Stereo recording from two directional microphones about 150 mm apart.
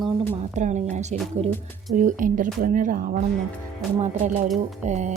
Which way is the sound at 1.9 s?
60° right (ahead or behind).